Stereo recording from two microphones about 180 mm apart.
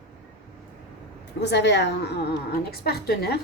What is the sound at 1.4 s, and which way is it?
A woman's voice, 70° left (ahead or behind).